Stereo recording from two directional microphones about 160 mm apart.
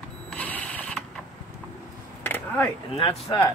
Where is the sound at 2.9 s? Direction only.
35° left (ahead or behind).